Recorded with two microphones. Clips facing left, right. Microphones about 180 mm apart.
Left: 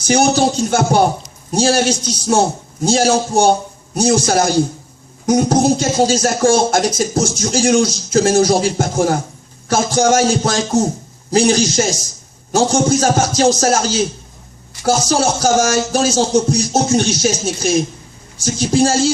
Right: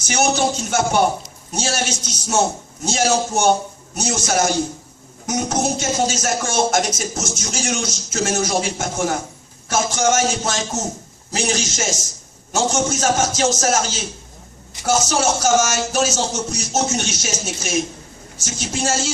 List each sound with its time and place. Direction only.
0.0 s speech: 35° left (ahead or behind)